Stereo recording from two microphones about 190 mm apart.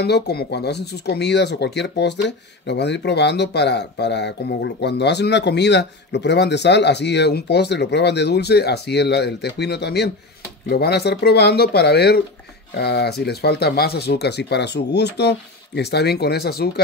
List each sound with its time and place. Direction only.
0.0 s speech: 60° left (ahead or behind)